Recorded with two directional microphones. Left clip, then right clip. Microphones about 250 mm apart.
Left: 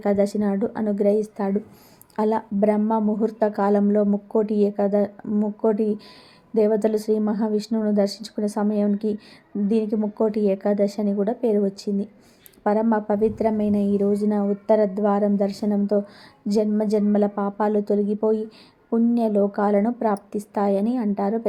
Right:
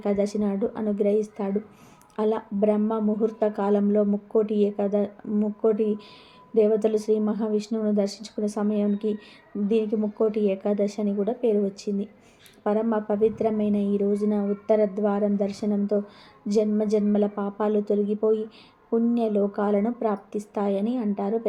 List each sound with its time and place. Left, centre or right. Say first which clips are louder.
0.0 s a woman's voice: left 4 dB; centre